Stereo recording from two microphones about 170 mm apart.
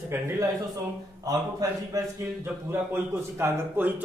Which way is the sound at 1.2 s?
20° right (ahead or behind).